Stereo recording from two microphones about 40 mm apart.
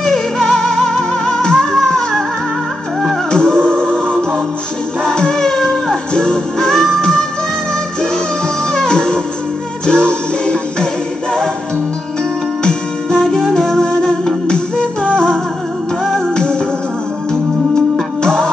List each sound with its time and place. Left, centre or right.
0.0 s music: centre
3.3 s music: centre
5.0 s music: centre
8.7 s music: centre
12.6 s music: centre
16.3 s music: left
18.2 s music: centre